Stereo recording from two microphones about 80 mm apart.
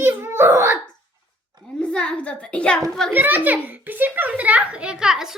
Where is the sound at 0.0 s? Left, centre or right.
Right.